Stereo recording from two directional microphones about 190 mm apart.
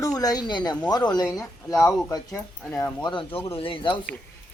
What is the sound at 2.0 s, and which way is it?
Speech, 15° left (ahead or behind).